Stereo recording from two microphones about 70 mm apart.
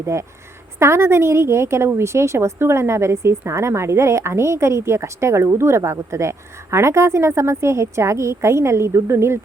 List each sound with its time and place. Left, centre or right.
0.0 s a woman's voice: right